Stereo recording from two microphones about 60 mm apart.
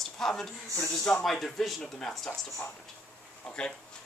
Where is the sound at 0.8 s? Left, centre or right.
Centre.